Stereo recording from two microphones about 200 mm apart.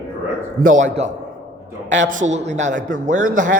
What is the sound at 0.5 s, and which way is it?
A man's voice, 40° right (ahead or behind).